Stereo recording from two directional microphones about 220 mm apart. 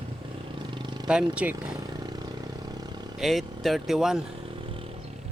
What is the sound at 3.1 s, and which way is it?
A man's voice, centre (ahead or behind).